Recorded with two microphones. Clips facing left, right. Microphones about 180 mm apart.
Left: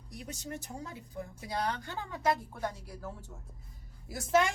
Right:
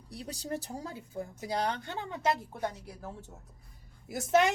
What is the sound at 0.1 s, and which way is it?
Speech, 35° right (ahead or behind).